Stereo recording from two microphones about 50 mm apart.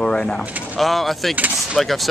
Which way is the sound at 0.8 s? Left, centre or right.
Centre.